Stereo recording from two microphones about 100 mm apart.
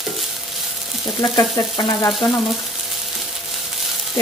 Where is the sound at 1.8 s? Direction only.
40° left (ahead or behind).